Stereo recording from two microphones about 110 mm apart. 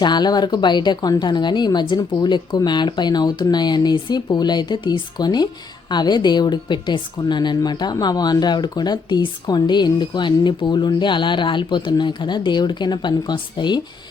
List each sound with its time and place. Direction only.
0.0 s a woman's voice: 40° left (ahead or behind)